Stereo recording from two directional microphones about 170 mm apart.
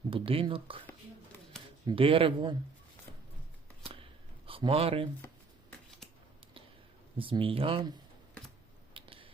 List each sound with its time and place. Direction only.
0.1 s speech: 30° right (ahead or behind)
1.9 s speech: 30° right (ahead or behind)
4.4 s speech: 30° right (ahead or behind)
7.2 s speech: 30° right (ahead or behind)
8.9 s a sound: 30° right (ahead or behind)